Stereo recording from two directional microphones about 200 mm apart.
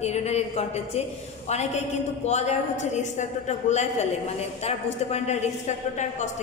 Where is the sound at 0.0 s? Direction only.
35° left (ahead or behind).